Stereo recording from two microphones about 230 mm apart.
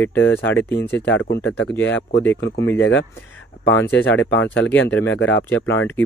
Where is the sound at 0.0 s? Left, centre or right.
Centre.